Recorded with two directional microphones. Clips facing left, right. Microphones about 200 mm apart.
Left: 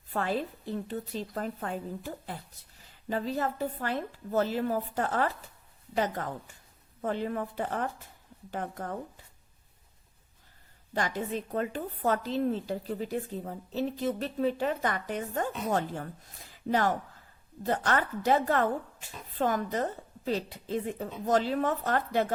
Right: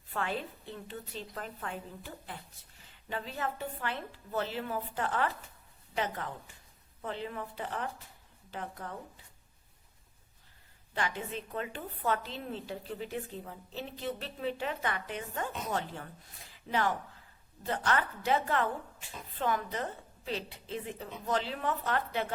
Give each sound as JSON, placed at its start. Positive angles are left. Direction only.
{"t": 0.1, "sound": "a woman's voice", "side_deg": 40}
{"t": 10.9, "sound": "a woman's voice", "side_deg": 40}
{"t": 17.6, "sound": "a woman's voice", "side_deg": 40}